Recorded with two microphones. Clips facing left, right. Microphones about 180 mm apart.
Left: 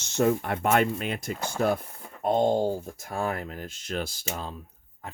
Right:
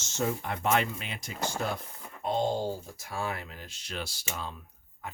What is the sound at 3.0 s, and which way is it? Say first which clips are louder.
Speech: left 5 dB; 50° left (ahead or behind).